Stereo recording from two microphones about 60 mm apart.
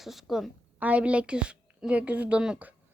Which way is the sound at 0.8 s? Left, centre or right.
Right.